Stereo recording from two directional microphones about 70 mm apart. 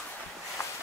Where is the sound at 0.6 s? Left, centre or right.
Left.